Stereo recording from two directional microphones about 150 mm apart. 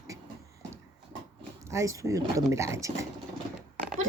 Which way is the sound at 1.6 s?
20° right (ahead or behind).